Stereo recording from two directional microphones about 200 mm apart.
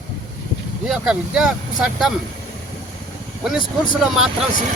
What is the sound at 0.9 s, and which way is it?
Speech, centre (ahead or behind).